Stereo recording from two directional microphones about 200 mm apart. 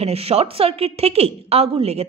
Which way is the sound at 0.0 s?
30° right (ahead or behind).